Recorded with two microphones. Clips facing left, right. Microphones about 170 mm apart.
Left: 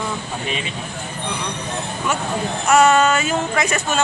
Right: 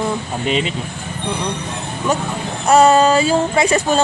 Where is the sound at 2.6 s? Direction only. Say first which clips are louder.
Right 3 dB; 35° right (ahead or behind).